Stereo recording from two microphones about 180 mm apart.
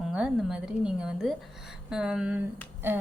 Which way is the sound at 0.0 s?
5° right (ahead or behind).